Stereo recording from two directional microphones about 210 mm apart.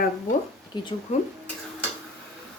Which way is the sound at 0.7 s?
20° left (ahead or behind).